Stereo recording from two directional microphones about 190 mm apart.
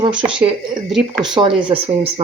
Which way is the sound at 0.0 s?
25° right (ahead or behind).